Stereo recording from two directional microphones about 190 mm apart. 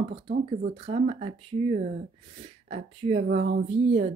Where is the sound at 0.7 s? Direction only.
30° right (ahead or behind).